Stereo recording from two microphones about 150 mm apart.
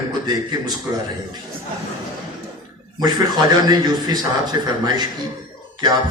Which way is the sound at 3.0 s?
30° right (ahead or behind).